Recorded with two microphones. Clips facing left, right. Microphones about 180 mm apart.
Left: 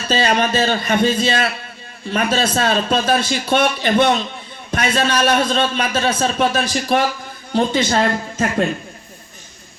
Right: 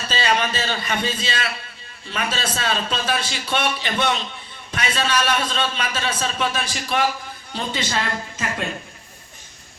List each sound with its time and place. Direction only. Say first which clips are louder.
0.1 s a man's voice: left 6 dB; 45° left (ahead or behind)